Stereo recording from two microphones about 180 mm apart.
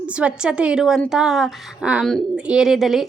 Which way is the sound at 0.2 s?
5° right (ahead or behind).